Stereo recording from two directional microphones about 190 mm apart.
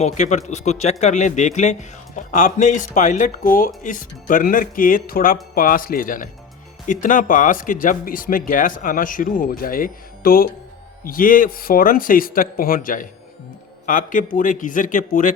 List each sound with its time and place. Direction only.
0.0 s speech: 40° left (ahead or behind)